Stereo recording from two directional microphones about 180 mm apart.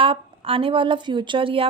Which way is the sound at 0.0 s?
30° right (ahead or behind).